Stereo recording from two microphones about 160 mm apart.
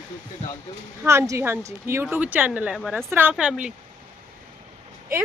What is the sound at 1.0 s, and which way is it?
Speech, 15° right (ahead or behind).